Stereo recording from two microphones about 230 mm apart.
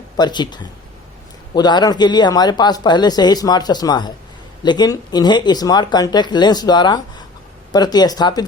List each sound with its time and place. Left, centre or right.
0.2 s speech: centre